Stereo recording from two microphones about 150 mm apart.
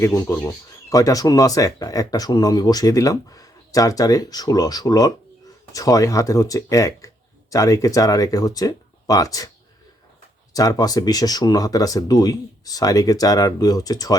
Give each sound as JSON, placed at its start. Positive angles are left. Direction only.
{"t": 0.0, "sound": "speech", "side_deg": 20}
{"t": 10.5, "sound": "speech", "side_deg": 25}